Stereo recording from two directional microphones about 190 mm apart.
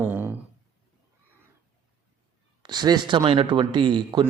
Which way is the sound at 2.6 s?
20° right (ahead or behind).